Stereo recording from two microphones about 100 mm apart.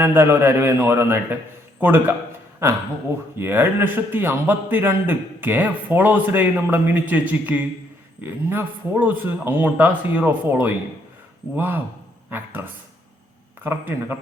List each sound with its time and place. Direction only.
0.0 s a man's voice: 20° right (ahead or behind)